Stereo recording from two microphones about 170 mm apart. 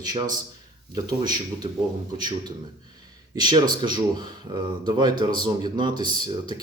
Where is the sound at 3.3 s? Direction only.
25° right (ahead or behind).